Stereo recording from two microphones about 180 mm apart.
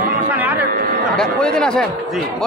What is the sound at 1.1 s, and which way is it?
Speech, 5° left (ahead or behind).